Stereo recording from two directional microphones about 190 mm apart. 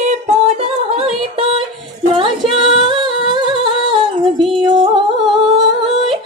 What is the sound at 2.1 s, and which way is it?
Singing, 25° right (ahead or behind).